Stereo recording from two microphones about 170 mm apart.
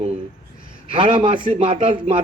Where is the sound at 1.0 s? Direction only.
30° right (ahead or behind).